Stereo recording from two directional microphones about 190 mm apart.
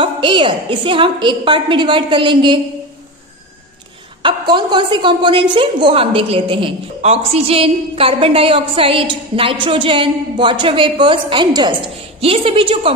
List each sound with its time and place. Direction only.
0.0 s a woman's voice: 25° right (ahead or behind)
4.2 s a woman's voice: 25° right (ahead or behind)